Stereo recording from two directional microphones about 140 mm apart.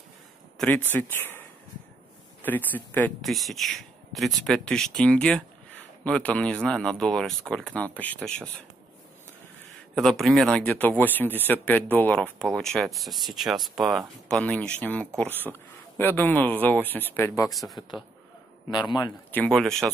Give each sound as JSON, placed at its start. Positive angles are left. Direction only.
{"t": 0.6, "sound": "speech", "side_deg": 10}
{"t": 2.4, "sound": "speech", "side_deg": 15}
{"t": 3.2, "sound": "speech", "side_deg": 0}
{"t": 9.9, "sound": "speech", "side_deg": 0}
{"t": 15.2, "sound": "speech", "side_deg": -15}
{"t": 16.0, "sound": "speech", "side_deg": 15}
{"t": 17.5, "sound": "speech", "side_deg": 0}
{"t": 18.7, "sound": "a man's voice", "side_deg": 30}
{"t": 19.3, "sound": "speech", "side_deg": 5}